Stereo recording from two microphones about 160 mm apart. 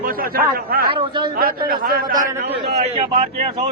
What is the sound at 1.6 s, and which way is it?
A man's voice, 65° right (ahead or behind).